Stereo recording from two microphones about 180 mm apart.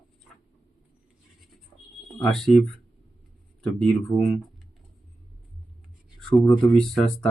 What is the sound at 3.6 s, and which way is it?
Speech, centre (ahead or behind).